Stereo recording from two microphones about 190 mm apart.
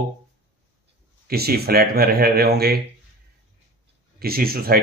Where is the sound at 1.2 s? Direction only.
55° right (ahead or behind).